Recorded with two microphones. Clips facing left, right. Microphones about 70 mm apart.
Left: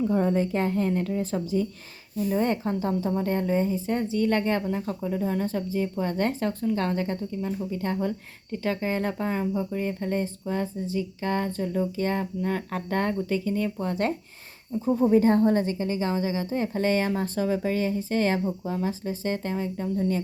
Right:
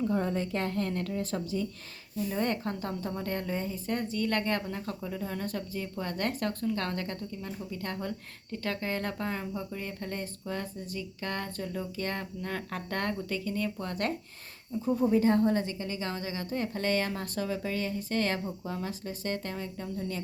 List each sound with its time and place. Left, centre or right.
0.1 s a woman's voice: left; by 1.5 s centre
2.3 s a woman's voice: centre
15.1 s a woman's voice: left